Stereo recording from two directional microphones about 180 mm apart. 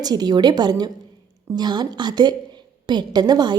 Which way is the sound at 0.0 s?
20° right (ahead or behind).